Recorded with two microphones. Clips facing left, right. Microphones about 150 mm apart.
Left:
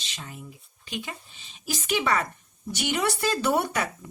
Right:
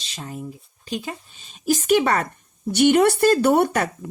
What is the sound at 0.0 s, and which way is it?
Speech, 40° right (ahead or behind).